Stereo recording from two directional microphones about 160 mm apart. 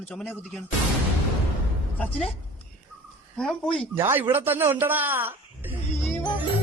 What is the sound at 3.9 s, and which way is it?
Speech, 15° right (ahead or behind).